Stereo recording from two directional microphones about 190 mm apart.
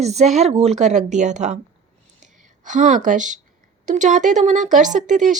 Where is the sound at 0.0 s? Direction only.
35° right (ahead or behind).